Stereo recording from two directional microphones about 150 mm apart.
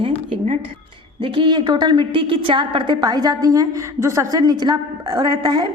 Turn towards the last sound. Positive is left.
turn(degrees=-30)  # may be behind; listen again after turning